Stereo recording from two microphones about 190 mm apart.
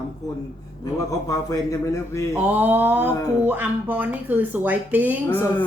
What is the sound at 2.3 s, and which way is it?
A child's voice, 10° right (ahead or behind).